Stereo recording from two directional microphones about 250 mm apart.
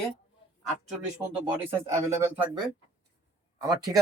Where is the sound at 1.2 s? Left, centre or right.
Centre.